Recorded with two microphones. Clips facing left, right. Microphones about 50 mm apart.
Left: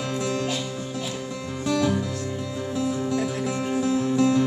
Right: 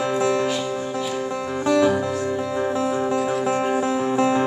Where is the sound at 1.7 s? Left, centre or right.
Right.